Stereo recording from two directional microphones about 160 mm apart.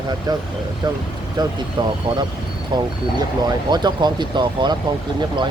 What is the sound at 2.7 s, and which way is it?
Speech, 25° right (ahead or behind).